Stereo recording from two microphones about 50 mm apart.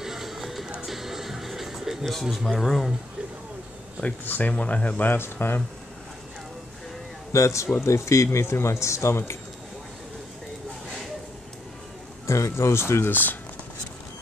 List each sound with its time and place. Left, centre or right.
0.0 s music: centre
2.4 s speech: centre
4.2 s speech: left
5.1 s speech: left
7.3 s speech: left
7.8 s speech: left
12.3 s speech: left
13.1 s speech: left